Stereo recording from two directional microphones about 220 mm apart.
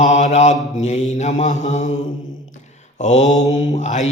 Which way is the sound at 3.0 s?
30° left (ahead or behind).